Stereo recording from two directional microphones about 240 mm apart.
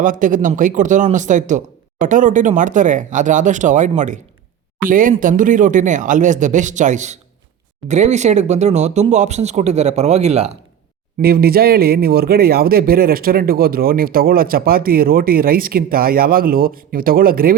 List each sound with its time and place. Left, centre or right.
0.0 s speech: right
11.2 s speech: right